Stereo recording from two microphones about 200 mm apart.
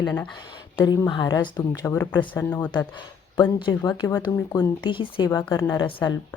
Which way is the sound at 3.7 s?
20° left (ahead or behind).